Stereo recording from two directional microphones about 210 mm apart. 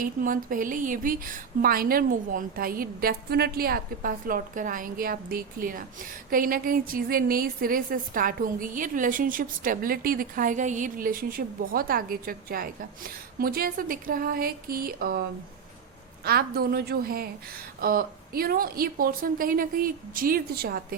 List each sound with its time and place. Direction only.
0.0 s a woman's voice: 40° right (ahead or behind)